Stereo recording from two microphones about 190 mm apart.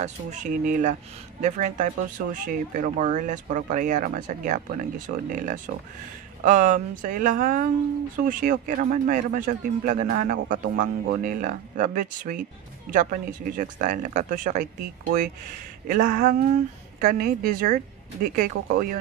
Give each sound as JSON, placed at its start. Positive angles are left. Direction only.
{"t": 0.0, "sound": "speech", "side_deg": -40}
{"t": 15.9, "sound": "speech", "side_deg": -45}